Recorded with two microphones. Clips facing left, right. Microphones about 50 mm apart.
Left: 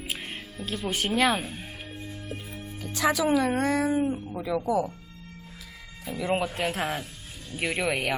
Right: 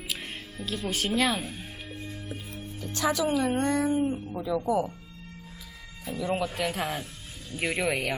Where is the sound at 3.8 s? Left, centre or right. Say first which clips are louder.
Left 1 dB; left.